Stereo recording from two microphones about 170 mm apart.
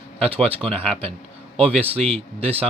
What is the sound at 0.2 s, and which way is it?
Speech, 35° right (ahead or behind).